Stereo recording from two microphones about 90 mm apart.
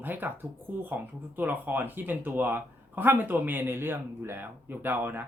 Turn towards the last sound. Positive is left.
turn(degrees=-25)  # may be behind; listen again after turning